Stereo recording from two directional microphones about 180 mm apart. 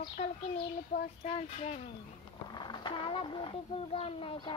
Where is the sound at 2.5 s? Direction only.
25° left (ahead or behind).